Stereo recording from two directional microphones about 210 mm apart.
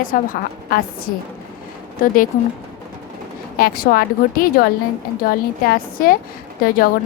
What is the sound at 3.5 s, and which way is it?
A woman's voice, 45° left (ahead or behind).